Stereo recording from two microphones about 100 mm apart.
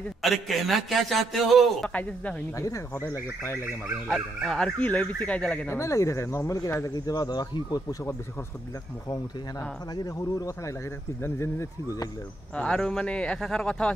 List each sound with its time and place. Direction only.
0.2 s a man's voice: centre (ahead or behind)
2.0 s speech: 15° left (ahead or behind)
2.5 s speech: 30° left (ahead or behind)
4.1 s speech: 5° left (ahead or behind)
5.7 s speech: 30° left (ahead or behind)
7.1 s speech: 45° left (ahead or behind)
10.0 s speech: 35° left (ahead or behind)
12.5 s speech: 10° left (ahead or behind)